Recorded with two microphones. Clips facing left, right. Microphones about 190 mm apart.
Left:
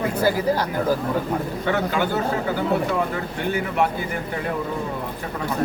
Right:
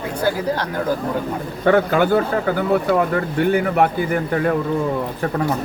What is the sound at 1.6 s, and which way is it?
A man's voice, 55° right (ahead or behind).